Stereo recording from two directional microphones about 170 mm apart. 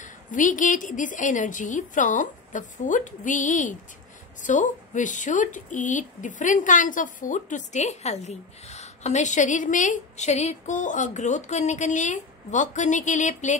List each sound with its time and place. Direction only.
0.0 s a woman's voice: 50° left (ahead or behind)